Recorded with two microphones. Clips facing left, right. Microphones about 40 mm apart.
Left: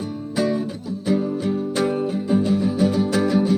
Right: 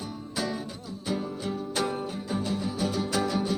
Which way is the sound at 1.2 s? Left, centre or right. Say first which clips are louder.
Left 10 dB; centre.